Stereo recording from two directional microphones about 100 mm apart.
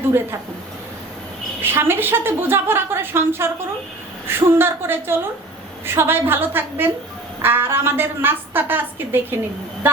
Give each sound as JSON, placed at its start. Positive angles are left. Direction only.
{"t": 1.6, "sound": "a woman's voice", "side_deg": -20}